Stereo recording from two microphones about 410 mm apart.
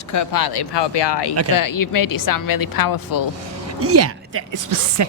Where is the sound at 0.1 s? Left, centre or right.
Left.